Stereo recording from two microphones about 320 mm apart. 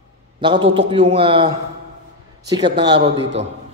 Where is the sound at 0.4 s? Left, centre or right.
Centre.